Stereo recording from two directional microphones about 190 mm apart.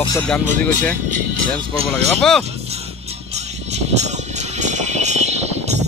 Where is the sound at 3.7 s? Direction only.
35° right (ahead or behind).